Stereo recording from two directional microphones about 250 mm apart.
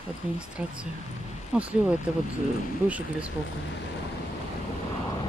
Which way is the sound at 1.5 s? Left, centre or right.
Centre.